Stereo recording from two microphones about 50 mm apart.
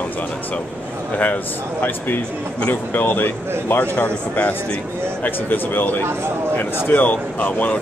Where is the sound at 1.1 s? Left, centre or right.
Left.